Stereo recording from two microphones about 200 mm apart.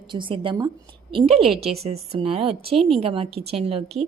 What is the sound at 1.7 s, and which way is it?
A woman's voice, 30° right (ahead or behind).